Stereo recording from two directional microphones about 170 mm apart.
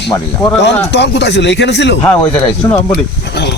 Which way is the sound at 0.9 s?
90° left.